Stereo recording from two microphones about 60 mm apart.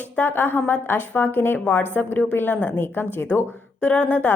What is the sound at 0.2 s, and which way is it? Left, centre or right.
A woman's voice, left.